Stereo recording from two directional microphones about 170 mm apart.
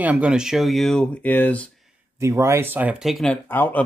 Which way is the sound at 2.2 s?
15° right (ahead or behind).